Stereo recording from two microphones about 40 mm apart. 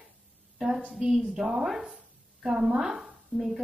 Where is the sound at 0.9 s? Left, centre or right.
Centre.